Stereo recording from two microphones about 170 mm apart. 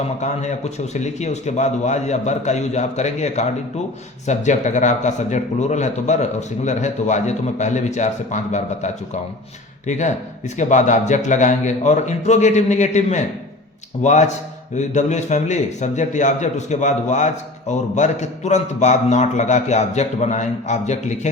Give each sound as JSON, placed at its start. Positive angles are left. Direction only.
{"t": 0.2, "sound": "a man's voice", "side_deg": 45}